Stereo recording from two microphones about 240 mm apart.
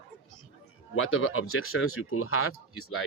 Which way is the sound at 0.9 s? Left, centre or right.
Left.